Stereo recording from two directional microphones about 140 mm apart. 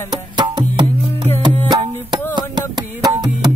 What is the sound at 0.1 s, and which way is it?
Music, 30° right (ahead or behind).